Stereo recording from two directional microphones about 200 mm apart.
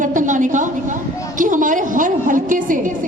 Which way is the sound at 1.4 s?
40° right (ahead or behind).